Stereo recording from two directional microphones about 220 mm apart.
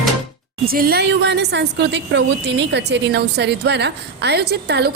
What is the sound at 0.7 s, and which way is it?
A woman's voice, 45° right (ahead or behind).